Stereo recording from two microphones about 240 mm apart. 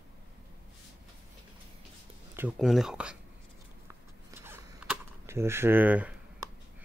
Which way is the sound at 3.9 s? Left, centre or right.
Centre.